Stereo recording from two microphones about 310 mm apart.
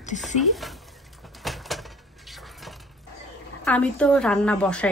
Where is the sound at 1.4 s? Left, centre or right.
Centre.